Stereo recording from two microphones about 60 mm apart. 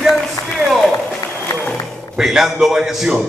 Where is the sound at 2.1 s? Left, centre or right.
Centre.